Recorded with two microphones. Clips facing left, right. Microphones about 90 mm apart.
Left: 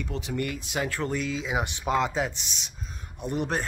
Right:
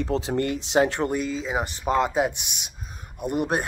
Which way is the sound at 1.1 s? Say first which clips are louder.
Right 3 dB; centre (ahead or behind).